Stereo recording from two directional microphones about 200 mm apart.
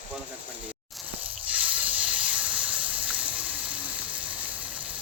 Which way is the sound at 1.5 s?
5° right (ahead or behind).